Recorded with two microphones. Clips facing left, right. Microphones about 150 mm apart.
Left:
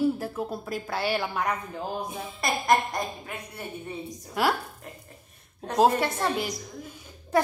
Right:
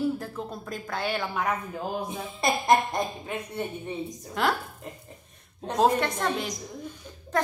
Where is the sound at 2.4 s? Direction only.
25° right (ahead or behind).